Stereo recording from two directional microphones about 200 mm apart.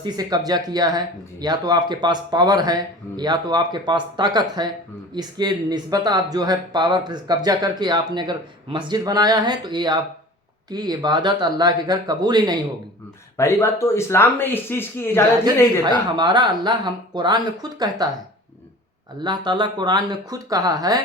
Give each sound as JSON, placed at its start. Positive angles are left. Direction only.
{"t": 0.0, "sound": "speech", "side_deg": -20}
{"t": 13.3, "sound": "speech", "side_deg": 15}
{"t": 15.8, "sound": "speech", "side_deg": -20}
{"t": 19.2, "sound": "speech", "side_deg": -20}